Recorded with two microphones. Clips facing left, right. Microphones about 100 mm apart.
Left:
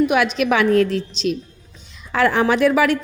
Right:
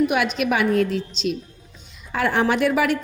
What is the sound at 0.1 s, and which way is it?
A woman's voice, 90° left.